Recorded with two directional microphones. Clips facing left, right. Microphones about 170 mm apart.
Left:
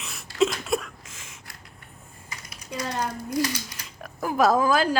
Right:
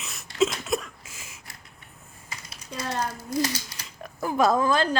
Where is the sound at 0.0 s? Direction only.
Centre (ahead or behind).